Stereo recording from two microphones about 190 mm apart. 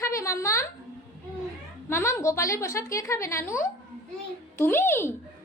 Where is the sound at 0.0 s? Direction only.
15° left (ahead or behind).